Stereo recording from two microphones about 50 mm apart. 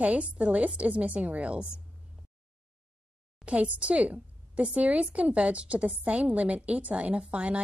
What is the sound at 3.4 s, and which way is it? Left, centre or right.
A woman's voice, right.